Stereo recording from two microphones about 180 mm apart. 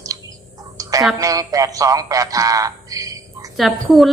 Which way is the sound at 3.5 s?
Centre (ahead or behind).